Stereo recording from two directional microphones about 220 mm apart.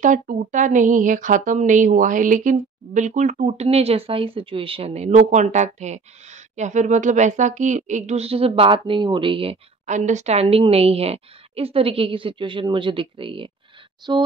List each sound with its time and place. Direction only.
0.0 s a woman's voice: 35° right (ahead or behind); by 14.2 s 20° right (ahead or behind)